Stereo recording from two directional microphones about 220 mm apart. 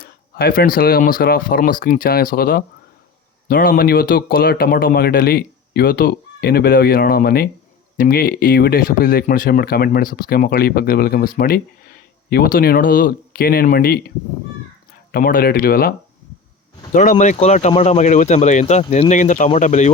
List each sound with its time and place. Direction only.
0.0 s speech: 45° left (ahead or behind)
15.1 s speech: 40° left (ahead or behind)
16.9 s speech: 35° left (ahead or behind)